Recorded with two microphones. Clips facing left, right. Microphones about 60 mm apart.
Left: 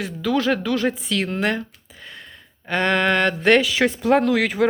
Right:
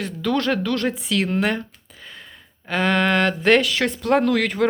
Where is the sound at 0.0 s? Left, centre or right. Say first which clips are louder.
Left 1 dB; centre.